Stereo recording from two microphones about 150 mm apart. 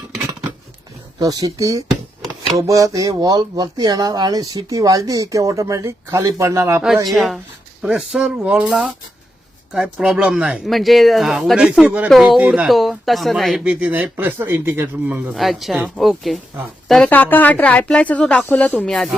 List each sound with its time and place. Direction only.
1.2 s speech: 25° right (ahead or behind)
7.1 s speech: centre (ahead or behind)
15.4 s speech: centre (ahead or behind)